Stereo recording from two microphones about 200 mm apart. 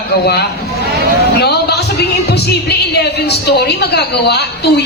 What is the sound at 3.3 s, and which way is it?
A woman's voice, 55° left (ahead or behind).